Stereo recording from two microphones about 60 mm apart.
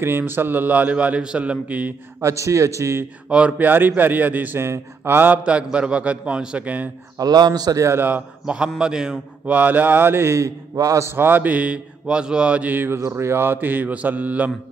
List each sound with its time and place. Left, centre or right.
0.0 s a man's voice: right
2.2 s a man's voice: right
3.3 s a man's voice: right
4.6 s a man's voice: right
5.4 s a man's voice: centre
7.2 s a man's voice: right
7.9 s a man's voice: right
8.5 s a man's voice: centre
9.5 s a man's voice: right
11.1 s a man's voice: right; by 12.7 s centre
12.9 s a man's voice: right